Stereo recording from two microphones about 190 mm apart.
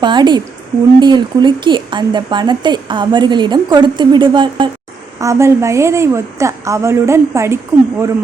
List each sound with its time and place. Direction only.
0.0 s a woman's voice: 25° right (ahead or behind)
5.2 s a woman's voice: 15° right (ahead or behind)